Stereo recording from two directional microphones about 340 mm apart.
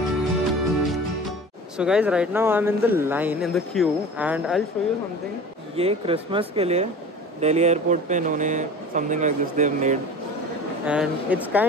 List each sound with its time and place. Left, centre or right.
0.2 s music: centre
1.8 s speech: centre
5.8 s speech: centre
10.9 s speech: centre